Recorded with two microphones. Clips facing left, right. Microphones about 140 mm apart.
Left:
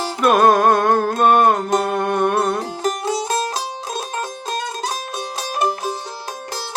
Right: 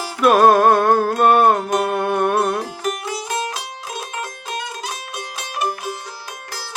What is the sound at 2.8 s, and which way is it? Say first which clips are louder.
Music: left 4 dB; 35° left (ahead or behind).